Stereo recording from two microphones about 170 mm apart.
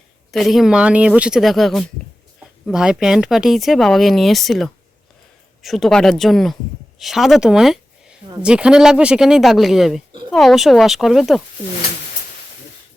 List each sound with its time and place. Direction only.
0.3 s speech: centre (ahead or behind)